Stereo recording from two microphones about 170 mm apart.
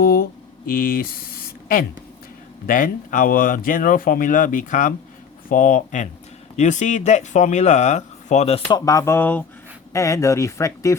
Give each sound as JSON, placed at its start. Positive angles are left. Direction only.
{"t": 0.0, "sound": "a sound", "side_deg": 65}
{"t": 2.6, "sound": "speech", "side_deg": 55}
{"t": 8.8, "sound": "speech", "side_deg": 20}